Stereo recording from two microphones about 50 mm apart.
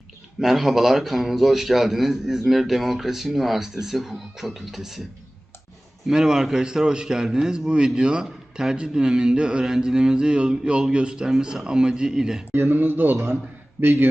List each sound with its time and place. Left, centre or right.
0.3 s a man's voice: centre
6.1 s a man's voice: centre
12.5 s speech: right